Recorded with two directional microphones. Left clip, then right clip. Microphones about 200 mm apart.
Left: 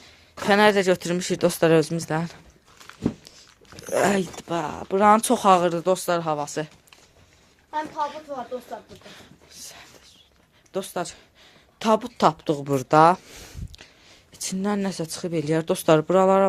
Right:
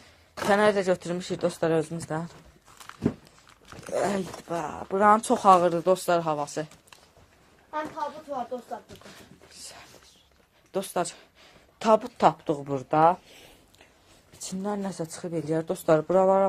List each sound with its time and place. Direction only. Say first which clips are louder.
0.4 s speech: left 4 dB; 30° left (ahead or behind)
3.8 s speech: left 6 dB; 40° left (ahead or behind); by 6.7 s 20° left (ahead or behind)
10.7 s a woman's voice: even; centre (ahead or behind)
11.8 s speech: even; 20° left (ahead or behind)
12.1 s speech: left 2 dB; 40° left (ahead or behind); by 13.1 s 60° left (ahead or behind)
14.4 s speech: left 5 dB; 50° left (ahead or behind)